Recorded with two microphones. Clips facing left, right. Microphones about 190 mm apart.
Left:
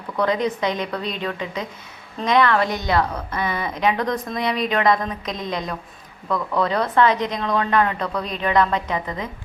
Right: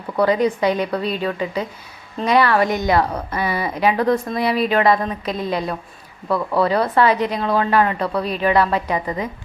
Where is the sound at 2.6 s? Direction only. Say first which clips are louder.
Right 5 dB; 50° right (ahead or behind).